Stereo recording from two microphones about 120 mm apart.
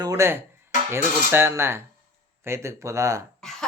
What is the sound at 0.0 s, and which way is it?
Speech, 25° right (ahead or behind).